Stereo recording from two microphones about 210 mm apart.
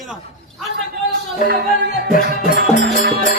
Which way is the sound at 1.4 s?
45° right (ahead or behind).